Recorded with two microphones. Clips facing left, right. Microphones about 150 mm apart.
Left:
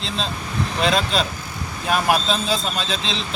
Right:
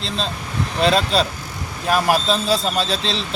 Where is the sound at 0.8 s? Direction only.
Centre (ahead or behind).